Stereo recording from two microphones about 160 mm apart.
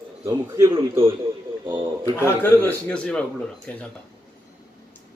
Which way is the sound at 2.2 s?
10° left (ahead or behind).